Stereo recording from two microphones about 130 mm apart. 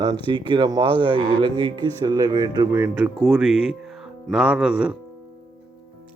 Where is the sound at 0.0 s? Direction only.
35° right (ahead or behind).